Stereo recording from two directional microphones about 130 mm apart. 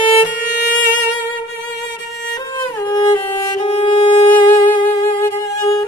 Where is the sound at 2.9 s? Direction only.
25° left (ahead or behind).